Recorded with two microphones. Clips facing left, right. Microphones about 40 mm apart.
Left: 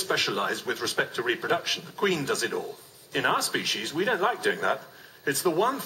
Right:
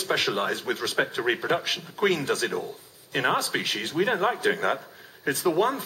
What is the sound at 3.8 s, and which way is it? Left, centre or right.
Speech, centre.